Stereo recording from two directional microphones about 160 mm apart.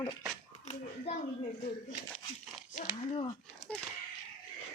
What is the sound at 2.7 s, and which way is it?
Speech, 35° left (ahead or behind).